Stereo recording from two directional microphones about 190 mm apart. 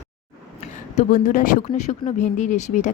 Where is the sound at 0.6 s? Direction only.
40° left (ahead or behind).